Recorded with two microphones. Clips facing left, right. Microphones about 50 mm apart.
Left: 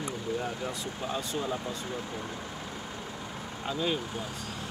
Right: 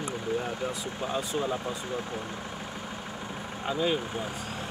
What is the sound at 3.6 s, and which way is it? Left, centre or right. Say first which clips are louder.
Speech: right 3 dB; centre.